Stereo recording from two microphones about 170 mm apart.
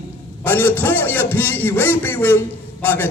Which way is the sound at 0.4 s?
10° left (ahead or behind).